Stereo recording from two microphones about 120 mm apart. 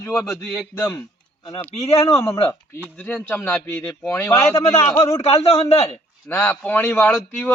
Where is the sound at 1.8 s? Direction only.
55° left (ahead or behind).